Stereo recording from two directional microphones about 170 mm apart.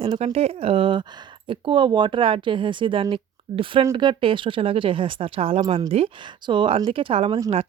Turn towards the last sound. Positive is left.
turn(degrees=-30)  # may be behind; listen again after turning